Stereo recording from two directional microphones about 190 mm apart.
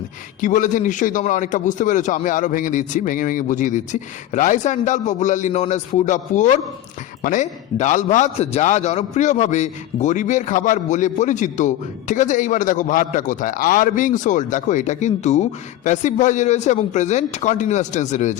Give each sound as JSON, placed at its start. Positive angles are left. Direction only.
{"t": 0.4, "sound": "a man's voice", "side_deg": 40}